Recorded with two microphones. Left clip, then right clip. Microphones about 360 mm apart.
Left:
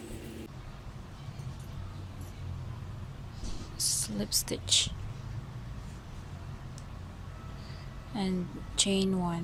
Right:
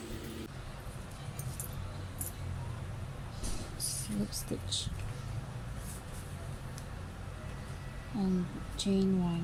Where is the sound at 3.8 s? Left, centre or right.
Centre.